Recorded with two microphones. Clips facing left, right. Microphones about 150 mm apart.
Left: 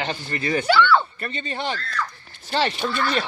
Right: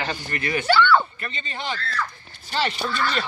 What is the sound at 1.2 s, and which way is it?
Speech, 45° left (ahead or behind).